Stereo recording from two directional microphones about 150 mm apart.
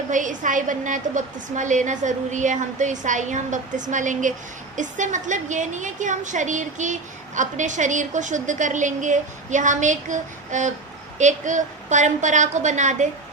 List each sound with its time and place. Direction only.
0.1 s a woman's voice: 60° right (ahead or behind)